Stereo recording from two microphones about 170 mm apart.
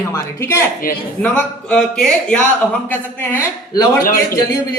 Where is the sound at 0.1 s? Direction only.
15° left (ahead or behind).